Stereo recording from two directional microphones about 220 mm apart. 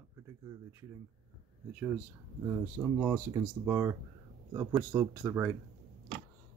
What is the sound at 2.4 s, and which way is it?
Speech, 10° right (ahead or behind).